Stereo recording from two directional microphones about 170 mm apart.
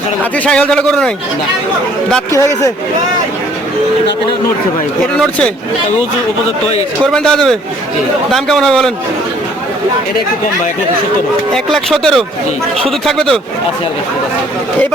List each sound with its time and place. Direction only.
0.2 s speech: 5° left (ahead or behind)
2.3 s speech: 15° left (ahead or behind)
7.0 s speech: 5° left (ahead or behind)
11.5 s speech: centre (ahead or behind)